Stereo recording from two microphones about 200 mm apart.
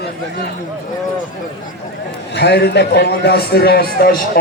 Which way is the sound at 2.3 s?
55° left (ahead or behind).